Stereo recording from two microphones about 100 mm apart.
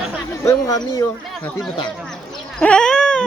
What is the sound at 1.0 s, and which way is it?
Speech, 20° left (ahead or behind).